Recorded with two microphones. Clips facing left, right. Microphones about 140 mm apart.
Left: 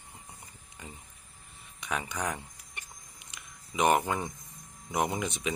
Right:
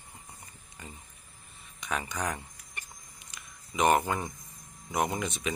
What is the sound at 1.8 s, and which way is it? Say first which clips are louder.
Speech: even; 10° left (ahead or behind).